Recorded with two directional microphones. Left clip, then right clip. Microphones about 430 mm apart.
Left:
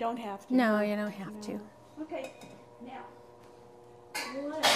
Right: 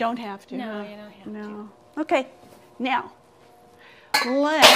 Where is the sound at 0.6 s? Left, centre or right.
Left.